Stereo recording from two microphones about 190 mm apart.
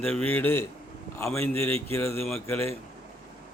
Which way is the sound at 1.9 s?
15° left (ahead or behind).